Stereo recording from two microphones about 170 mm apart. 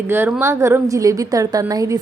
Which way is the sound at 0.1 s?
15° right (ahead or behind).